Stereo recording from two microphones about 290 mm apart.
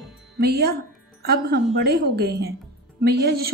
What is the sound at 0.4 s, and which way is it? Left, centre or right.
A woman's voice, right.